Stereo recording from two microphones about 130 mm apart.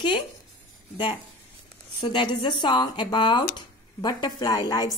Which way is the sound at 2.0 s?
40° left (ahead or behind).